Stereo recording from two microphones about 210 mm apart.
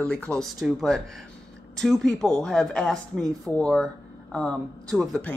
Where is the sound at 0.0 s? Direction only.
5° left (ahead or behind).